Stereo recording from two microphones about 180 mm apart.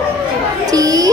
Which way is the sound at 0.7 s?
20° right (ahead or behind).